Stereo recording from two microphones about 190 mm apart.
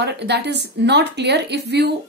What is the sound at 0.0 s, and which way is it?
A woman's voice, 65° right (ahead or behind).